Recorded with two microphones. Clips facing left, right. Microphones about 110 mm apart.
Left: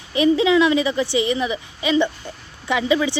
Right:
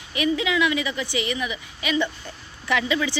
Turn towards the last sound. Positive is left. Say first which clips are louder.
# left 4 dB
turn(degrees=20)  # may be behind; listen again after turning